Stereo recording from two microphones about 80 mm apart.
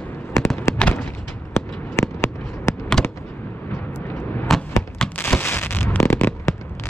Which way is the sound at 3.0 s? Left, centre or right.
Centre.